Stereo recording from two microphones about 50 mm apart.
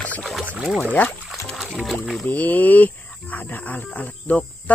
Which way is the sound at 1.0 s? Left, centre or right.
Centre.